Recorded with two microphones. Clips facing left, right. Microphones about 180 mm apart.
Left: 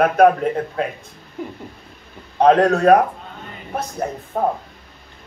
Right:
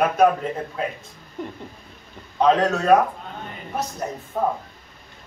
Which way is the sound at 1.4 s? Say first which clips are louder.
Left 2 dB; 5° left (ahead or behind).